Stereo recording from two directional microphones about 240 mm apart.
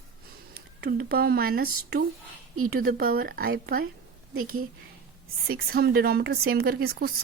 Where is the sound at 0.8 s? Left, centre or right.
Right.